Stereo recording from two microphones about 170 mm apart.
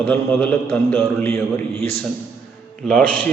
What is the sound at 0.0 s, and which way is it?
A man's voice, 10° left (ahead or behind).